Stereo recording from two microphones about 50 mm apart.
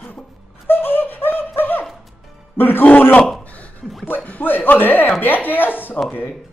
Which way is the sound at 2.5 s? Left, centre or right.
Left.